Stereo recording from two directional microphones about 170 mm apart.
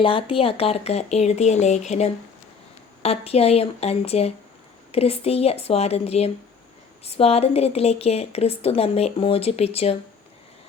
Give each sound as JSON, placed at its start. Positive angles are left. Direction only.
{"t": 0.0, "sound": "a woman's voice", "side_deg": 30}